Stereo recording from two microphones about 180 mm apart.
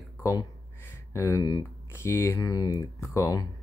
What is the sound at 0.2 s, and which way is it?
Speech, 20° left (ahead or behind).